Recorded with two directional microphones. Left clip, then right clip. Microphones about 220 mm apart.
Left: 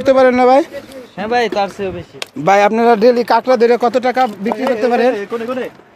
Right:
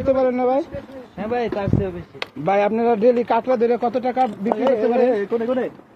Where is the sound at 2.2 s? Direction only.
30° left (ahead or behind).